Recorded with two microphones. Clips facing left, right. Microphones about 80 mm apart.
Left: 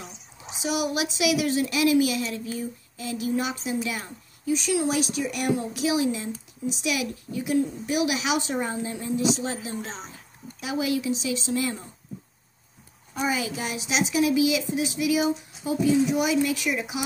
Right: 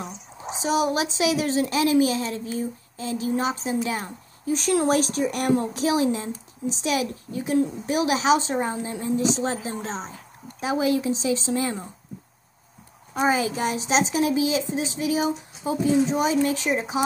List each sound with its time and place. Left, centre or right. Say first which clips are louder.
0.4 s a woman's voice: right 4 dB; right
13.1 s a woman's voice: right 5 dB; right